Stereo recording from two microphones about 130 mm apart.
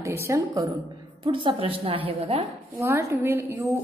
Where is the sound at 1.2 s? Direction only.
40° right (ahead or behind).